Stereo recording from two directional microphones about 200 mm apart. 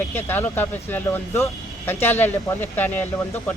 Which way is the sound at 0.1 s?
10° left (ahead or behind).